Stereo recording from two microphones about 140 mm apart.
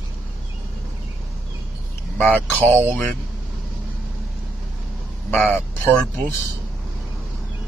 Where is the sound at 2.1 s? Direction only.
10° left (ahead or behind).